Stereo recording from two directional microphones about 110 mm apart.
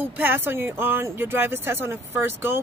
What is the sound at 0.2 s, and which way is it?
Speech, 20° right (ahead or behind).